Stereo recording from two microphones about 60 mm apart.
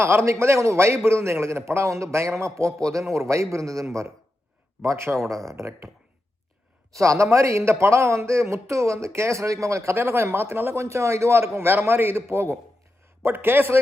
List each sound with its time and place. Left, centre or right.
0.0 s a man's voice: right
6.9 s a man's voice: right
13.2 s a man's voice: right